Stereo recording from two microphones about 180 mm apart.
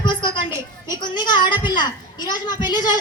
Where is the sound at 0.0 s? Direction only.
25° left (ahead or behind).